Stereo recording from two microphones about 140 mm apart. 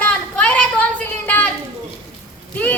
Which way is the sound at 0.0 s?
10° left (ahead or behind).